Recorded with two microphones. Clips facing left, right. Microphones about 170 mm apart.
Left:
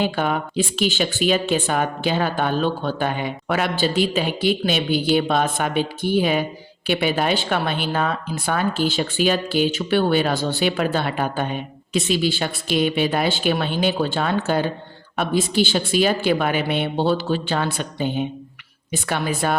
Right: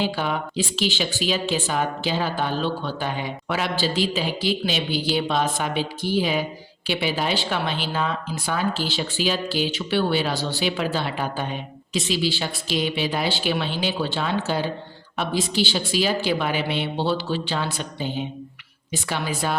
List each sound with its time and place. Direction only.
0.0 s speech: 55° left (ahead or behind)